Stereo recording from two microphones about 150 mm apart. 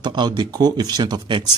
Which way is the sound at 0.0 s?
30° right (ahead or behind).